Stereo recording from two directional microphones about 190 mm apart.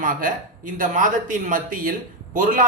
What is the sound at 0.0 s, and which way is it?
A man's voice, 45° right (ahead or behind).